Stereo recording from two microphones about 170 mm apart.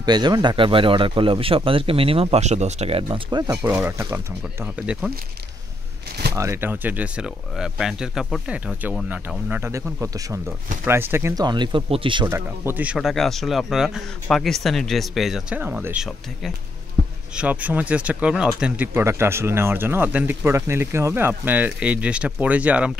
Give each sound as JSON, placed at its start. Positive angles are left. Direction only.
{"t": 0.0, "sound": "speech", "side_deg": -25}
{"t": 3.6, "sound": "speech", "side_deg": -10}
{"t": 6.3, "sound": "speech", "side_deg": -15}
{"t": 12.3, "sound": "speech", "side_deg": -15}